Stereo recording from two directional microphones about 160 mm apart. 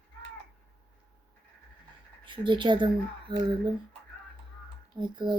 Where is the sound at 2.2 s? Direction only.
30° right (ahead or behind).